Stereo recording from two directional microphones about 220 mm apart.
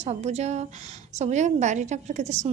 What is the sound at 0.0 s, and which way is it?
A woman's voice, 30° right (ahead or behind).